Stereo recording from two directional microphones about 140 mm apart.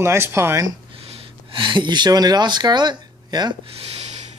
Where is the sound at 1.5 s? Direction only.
35° right (ahead or behind).